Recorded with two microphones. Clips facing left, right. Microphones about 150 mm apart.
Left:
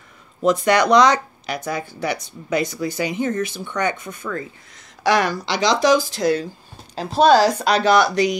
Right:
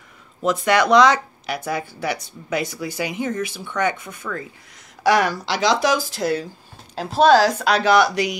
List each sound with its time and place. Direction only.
0.4 s speech: 5° right (ahead or behind)